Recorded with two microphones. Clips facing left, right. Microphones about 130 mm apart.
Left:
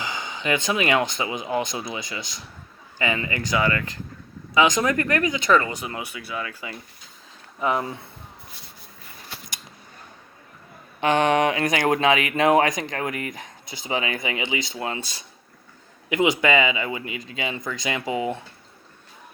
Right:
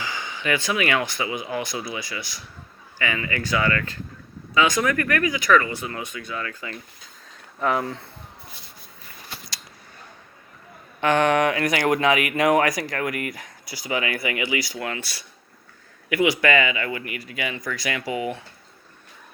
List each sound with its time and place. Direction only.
0.0 s speech: 20° left (ahead or behind)
5.7 s speech: 15° left (ahead or behind)
11.0 s speech: 20° left (ahead or behind)